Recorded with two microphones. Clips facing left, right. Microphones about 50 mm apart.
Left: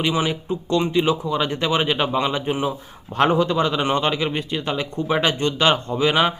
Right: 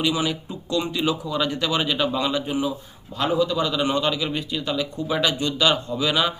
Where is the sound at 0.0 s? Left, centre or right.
Left.